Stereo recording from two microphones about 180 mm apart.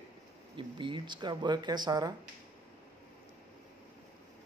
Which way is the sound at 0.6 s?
25° right (ahead or behind).